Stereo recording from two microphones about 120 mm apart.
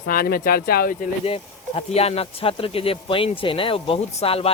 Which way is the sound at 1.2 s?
55° left (ahead or behind).